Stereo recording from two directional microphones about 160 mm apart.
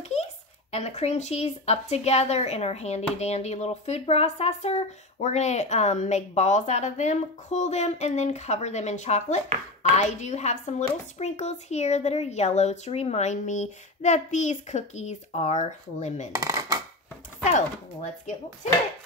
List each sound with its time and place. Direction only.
0.7 s speech: 40° left (ahead or behind)
16.3 s dishes: 20° right (ahead or behind)